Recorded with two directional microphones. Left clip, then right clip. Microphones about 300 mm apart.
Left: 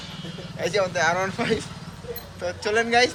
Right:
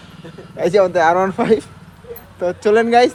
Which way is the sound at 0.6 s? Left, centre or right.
Centre.